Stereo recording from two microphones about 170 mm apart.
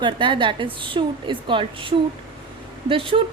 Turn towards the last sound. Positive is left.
turn(degrees=-30)  # may be behind; listen again after turning